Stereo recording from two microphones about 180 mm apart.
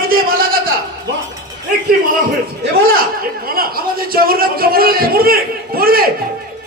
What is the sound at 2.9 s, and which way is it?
A man's voice, 55° right (ahead or behind).